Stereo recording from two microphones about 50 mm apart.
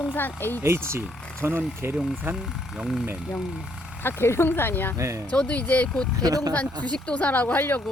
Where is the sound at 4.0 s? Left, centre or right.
Left.